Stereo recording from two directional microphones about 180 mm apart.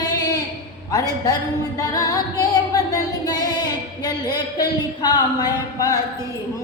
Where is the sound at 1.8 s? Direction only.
20° left (ahead or behind).